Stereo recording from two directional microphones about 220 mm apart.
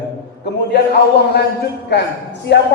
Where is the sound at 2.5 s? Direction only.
50° left (ahead or behind).